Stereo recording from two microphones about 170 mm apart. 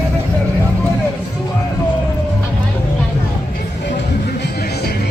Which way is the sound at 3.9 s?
75° left (ahead or behind).